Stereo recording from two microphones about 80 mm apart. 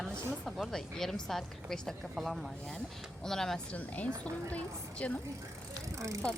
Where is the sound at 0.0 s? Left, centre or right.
Centre.